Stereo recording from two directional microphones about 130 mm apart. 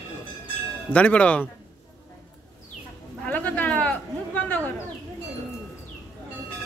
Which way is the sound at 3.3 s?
10° left (ahead or behind).